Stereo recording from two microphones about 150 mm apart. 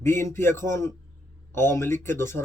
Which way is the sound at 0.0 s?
15° left (ahead or behind).